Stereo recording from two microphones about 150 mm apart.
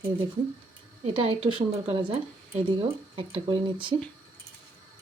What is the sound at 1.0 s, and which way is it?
Speech, 35° right (ahead or behind).